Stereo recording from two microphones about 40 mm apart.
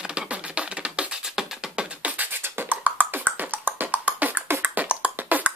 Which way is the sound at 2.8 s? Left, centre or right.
Right.